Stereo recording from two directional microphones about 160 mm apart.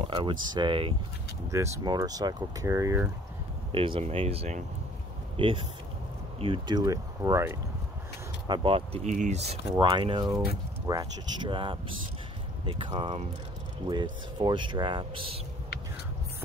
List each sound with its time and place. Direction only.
0.0 s speech: 35° right (ahead or behind)
1.5 s speech: 20° right (ahead or behind)
3.7 s speech: 35° right (ahead or behind); by 7.5 s 15° right (ahead or behind)
8.5 s speech: 35° right (ahead or behind)
9.1 s speech: 50° right (ahead or behind)